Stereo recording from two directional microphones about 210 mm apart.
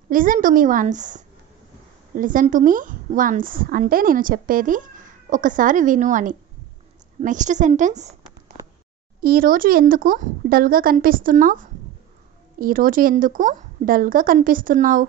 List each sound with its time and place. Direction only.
0.1 s a woman's voice: 40° right (ahead or behind)
9.2 s a woman's voice: 45° right (ahead or behind)